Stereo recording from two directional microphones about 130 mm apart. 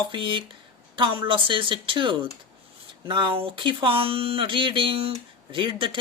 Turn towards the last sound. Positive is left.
turn(degrees=-40)  # may be behind; listen again after turning